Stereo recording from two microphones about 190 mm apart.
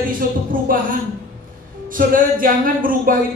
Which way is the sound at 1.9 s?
45° right (ahead or behind).